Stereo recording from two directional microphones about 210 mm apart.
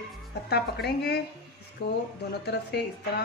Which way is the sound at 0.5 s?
50° left (ahead or behind).